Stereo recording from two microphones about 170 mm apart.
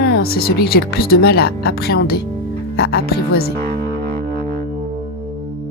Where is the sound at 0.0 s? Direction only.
65° left (ahead or behind).